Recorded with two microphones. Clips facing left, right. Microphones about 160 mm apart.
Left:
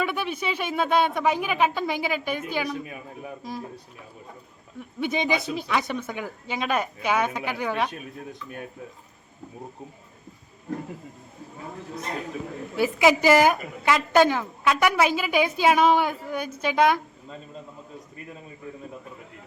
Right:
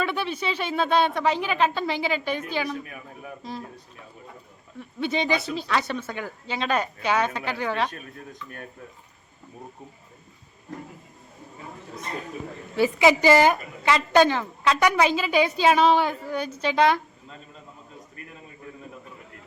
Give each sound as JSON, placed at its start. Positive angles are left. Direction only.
{"t": 0.0, "sound": "a woman's voice", "side_deg": 10}
{"t": 2.8, "sound": "speech", "side_deg": 20}
{"t": 4.9, "sound": "a woman's voice", "side_deg": 15}
{"t": 12.7, "sound": "a woman's voice", "side_deg": 10}